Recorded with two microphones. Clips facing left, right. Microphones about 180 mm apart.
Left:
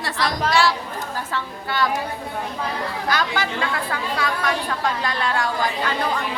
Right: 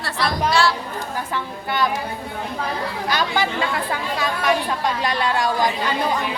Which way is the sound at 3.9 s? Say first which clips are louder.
Right 1 dB; 20° right (ahead or behind).